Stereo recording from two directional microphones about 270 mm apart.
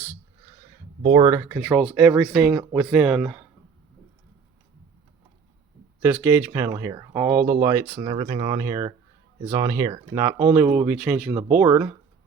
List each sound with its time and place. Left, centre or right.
1.0 s speech: centre
6.0 s speech: centre